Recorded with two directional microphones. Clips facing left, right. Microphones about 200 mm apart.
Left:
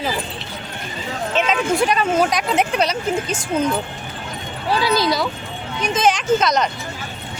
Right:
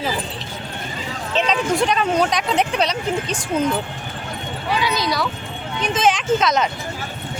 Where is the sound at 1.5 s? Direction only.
5° left (ahead or behind).